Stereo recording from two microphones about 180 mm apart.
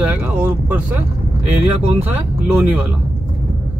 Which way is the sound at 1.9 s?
10° right (ahead or behind).